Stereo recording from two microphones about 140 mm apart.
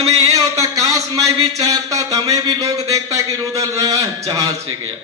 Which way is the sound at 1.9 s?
25° right (ahead or behind).